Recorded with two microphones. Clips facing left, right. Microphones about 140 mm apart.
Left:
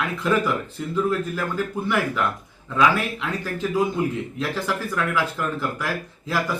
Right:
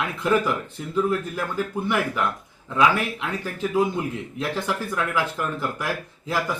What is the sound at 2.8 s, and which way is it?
Speech, 15° right (ahead or behind).